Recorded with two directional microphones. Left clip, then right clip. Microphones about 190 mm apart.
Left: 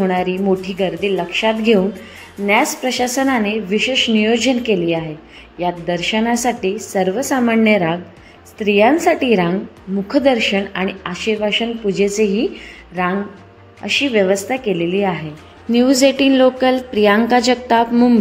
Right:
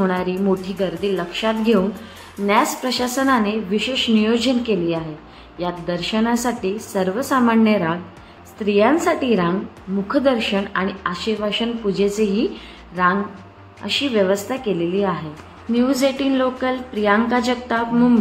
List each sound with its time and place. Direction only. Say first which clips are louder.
0.0 s a woman's voice: left 3 dB; 10° left (ahead or behind)
15.7 s a woman's voice: left 5 dB; 30° left (ahead or behind)